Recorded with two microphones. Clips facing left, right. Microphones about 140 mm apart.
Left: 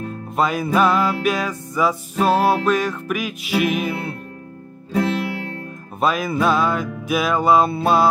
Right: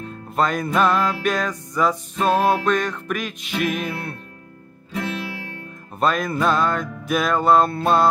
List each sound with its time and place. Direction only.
0.4 s music: 5° left (ahead or behind)
4.9 s music: 35° left (ahead or behind)
5.9 s music: 5° left (ahead or behind)